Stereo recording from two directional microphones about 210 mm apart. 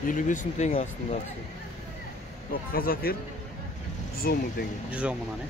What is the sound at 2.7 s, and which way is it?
Speech, 45° left (ahead or behind).